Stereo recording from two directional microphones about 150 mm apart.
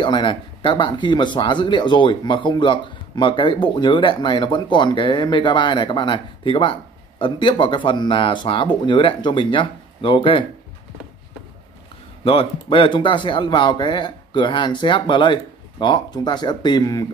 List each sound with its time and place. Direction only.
0.0 s speech: 35° left (ahead or behind)
12.3 s speech: 35° left (ahead or behind)